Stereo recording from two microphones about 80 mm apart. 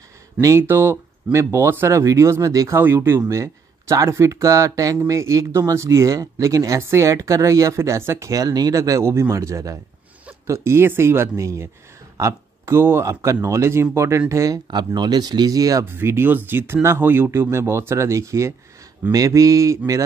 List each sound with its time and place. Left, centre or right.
0.4 s speech: right
0.7 s speech: right
2.8 s speech: right
8.3 s speech: right
14.7 s speech: right
15.8 s speech: right